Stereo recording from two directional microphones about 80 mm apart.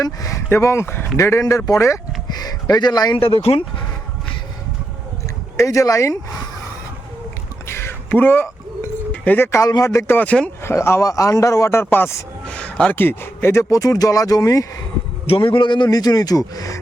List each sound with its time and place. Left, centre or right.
0.0 s speech: left
1.1 s a man's voice: left
2.3 s speech: left
3.5 s a man's voice: left
5.5 s speech: left
7.7 s a sound: left
9.2 s speech: left
9.8 s a man's voice: left
10.2 s speech: centre
10.6 s a man's voice: left
12.5 s speech: centre; by 13.7 s left
13.7 s speech: left
15.4 s a man's voice: left
15.9 s speech: left